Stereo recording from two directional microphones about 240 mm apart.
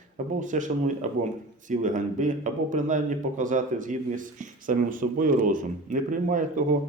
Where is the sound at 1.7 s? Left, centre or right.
Right.